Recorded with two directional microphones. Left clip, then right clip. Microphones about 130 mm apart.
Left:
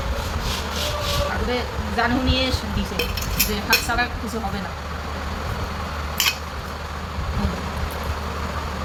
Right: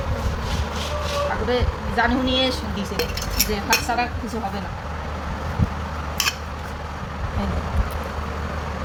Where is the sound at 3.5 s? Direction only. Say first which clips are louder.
Left 1 dB; 30° right (ahead or behind).